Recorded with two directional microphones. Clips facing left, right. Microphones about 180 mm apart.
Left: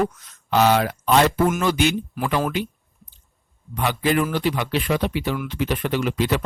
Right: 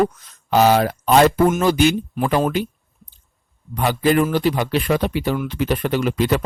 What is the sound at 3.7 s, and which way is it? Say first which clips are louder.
Speech: right 4 dB; 40° right (ahead or behind).